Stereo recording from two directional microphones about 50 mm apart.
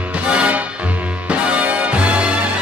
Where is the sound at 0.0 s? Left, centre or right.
Right.